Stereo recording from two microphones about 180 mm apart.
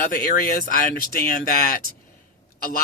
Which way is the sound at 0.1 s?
50° left (ahead or behind).